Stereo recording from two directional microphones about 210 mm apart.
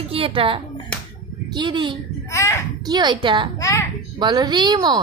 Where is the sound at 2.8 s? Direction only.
20° right (ahead or behind).